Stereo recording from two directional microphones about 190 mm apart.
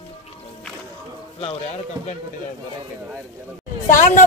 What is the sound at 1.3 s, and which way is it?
Speech, 35° left (ahead or behind).